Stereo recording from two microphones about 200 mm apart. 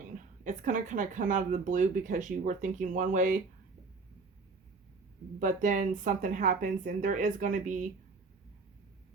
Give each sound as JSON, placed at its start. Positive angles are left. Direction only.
{"t": 0.4, "sound": "speech", "side_deg": -40}
{"t": 5.4, "sound": "speech", "side_deg": -40}